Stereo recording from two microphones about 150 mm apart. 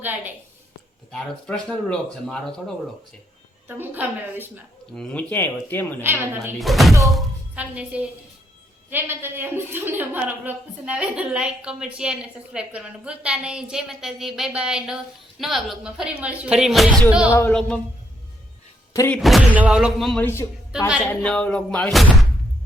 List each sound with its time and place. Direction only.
0.0 s a woman's voice: 10° right (ahead or behind)
1.1 s speech: 5° left (ahead or behind)
3.7 s a woman's voice: 15° right (ahead or behind)
4.9 s speech: 10° left (ahead or behind)
6.0 s a woman's voice: 15° right (ahead or behind)
6.6 s speech: centre (ahead or behind)
7.0 s thunk: centre (ahead or behind)
7.6 s a woman's voice: 10° right (ahead or behind)
17.5 s speech: 5° left (ahead or behind)
19.1 s speech: centre (ahead or behind)
20.2 s speech: 15° left (ahead or behind)
20.7 s speech: 5° right (ahead or behind)